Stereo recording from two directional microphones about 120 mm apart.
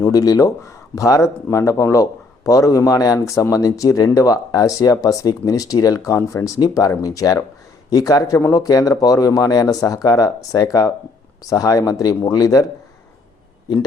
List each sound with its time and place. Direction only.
0.0 s speech: 30° left (ahead or behind)